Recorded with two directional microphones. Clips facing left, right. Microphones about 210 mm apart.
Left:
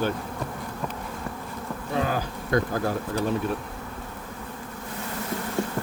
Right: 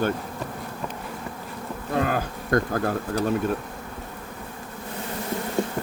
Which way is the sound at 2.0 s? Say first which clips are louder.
Right 2 dB; 50° right (ahead or behind).